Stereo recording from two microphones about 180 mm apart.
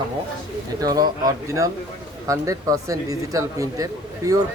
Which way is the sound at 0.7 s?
20° right (ahead or behind).